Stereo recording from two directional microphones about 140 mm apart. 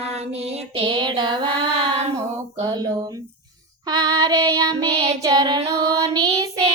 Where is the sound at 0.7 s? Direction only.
40° right (ahead or behind).